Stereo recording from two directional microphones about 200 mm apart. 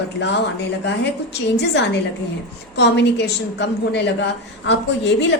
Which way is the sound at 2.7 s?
60° left (ahead or behind).